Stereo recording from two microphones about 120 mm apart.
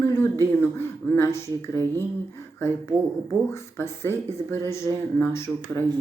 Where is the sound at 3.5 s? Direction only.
20° left (ahead or behind).